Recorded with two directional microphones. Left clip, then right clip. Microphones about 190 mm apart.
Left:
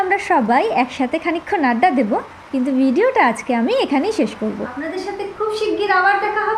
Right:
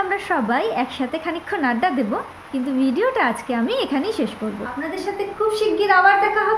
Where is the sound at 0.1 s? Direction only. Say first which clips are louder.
Left 5 dB; 15° left (ahead or behind).